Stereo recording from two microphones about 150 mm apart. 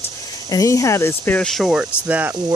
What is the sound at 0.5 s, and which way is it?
Speech, 20° left (ahead or behind).